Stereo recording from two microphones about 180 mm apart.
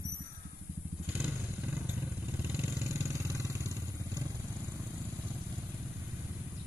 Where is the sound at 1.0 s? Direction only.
10° right (ahead or behind).